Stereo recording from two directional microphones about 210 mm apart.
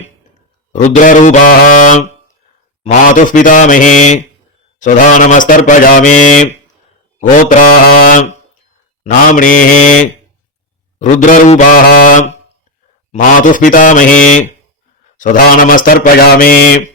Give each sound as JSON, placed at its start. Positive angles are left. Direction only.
{"t": 0.7, "sound": "a man's voice", "side_deg": 35}
{"t": 11.0, "sound": "a man's voice", "side_deg": 35}
{"t": 15.2, "sound": "a man's voice", "side_deg": 40}